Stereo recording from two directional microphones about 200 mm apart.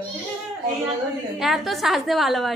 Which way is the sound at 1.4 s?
Centre (ahead or behind).